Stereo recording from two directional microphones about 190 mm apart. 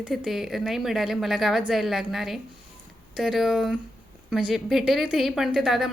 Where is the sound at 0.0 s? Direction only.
5° right (ahead or behind).